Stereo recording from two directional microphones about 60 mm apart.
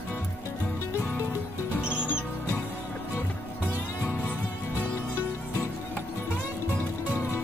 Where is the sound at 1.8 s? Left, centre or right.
Centre.